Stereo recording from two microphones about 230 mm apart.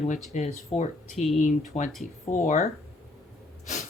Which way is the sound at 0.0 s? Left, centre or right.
Left.